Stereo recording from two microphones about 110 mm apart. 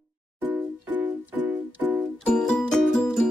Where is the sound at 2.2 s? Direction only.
10° left (ahead or behind).